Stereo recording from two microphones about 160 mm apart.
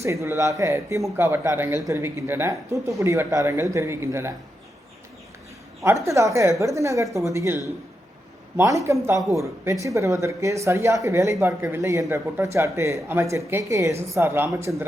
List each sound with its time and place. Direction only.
0.0 s speech: 20° right (ahead or behind)
5.8 s speech: 20° right (ahead or behind)